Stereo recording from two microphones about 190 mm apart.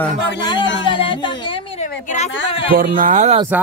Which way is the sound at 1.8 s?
35° left (ahead or behind).